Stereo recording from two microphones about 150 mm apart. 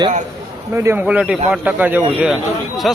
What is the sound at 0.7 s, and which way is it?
A man's voice, 15° right (ahead or behind).